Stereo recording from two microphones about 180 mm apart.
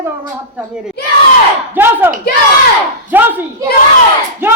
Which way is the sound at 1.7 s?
10° right (ahead or behind).